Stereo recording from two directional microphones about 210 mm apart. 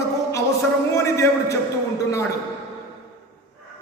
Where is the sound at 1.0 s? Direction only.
15° left (ahead or behind).